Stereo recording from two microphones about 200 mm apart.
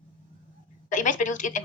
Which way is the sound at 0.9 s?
40° left (ahead or behind).